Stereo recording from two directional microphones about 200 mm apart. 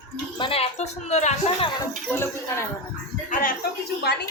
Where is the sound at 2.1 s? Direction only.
10° left (ahead or behind).